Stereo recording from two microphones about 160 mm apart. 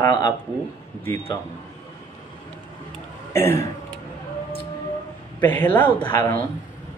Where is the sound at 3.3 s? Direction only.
15° left (ahead or behind).